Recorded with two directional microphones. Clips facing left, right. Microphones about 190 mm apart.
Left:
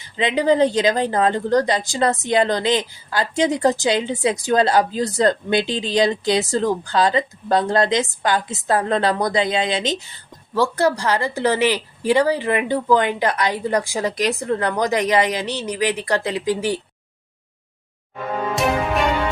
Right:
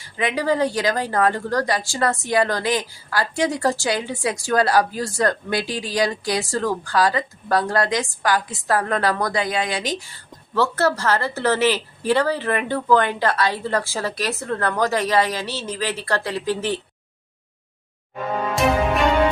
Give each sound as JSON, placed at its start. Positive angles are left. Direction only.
{"t": 0.0, "sound": "a woman's voice", "side_deg": 20}